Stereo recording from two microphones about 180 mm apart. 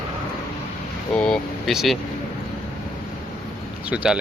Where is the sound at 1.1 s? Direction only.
5° left (ahead or behind).